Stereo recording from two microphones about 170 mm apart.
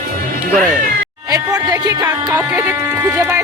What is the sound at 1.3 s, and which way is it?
Speech, 25° right (ahead or behind).